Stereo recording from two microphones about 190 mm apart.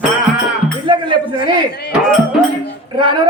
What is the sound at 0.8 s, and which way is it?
Speech, 25° right (ahead or behind).